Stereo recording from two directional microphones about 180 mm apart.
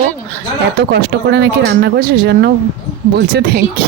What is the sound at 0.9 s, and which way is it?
Speech, 70° right (ahead or behind).